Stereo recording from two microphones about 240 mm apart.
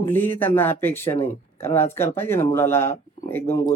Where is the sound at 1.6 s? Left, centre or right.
Centre.